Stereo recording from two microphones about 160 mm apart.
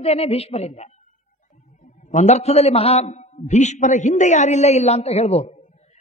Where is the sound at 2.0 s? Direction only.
45° left (ahead or behind).